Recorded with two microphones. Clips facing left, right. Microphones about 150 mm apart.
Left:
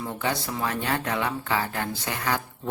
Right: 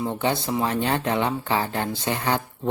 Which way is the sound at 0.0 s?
25° right (ahead or behind).